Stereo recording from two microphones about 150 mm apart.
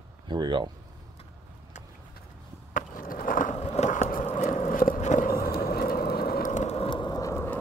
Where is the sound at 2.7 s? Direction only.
65° left (ahead or behind).